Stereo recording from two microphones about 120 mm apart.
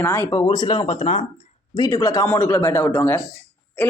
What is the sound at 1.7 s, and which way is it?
A man's voice, 30° left (ahead or behind).